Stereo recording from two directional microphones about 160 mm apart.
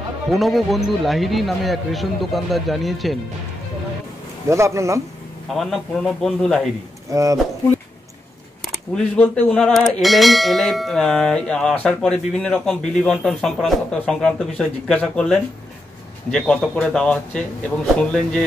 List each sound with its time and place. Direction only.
0.3 s bell: centre (ahead or behind)
4.5 s a man's voice: 20° right (ahead or behind)
5.5 s bell: centre (ahead or behind)
7.1 s speech: 20° right (ahead or behind)
8.9 s bell: 10° left (ahead or behind)